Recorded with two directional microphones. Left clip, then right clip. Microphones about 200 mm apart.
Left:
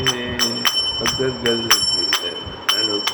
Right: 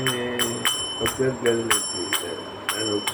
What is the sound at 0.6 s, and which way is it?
Bell, 15° left (ahead or behind).